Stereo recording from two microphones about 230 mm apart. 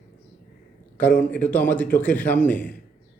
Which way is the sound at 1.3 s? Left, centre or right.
Centre.